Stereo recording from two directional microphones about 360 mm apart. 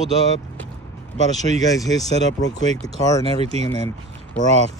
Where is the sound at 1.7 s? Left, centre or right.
Centre.